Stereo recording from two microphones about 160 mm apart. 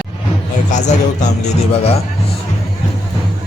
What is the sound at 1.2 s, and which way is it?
Speech, 45° left (ahead or behind).